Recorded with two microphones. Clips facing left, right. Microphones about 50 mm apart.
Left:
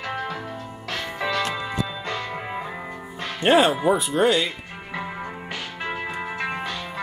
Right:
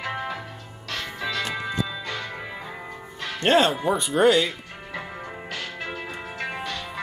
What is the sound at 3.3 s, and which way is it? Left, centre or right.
Speech, centre.